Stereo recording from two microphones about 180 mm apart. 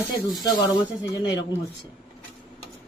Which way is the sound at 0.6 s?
20° left (ahead or behind).